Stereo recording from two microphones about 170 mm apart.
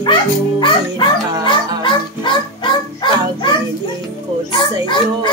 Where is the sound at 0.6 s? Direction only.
30° left (ahead or behind).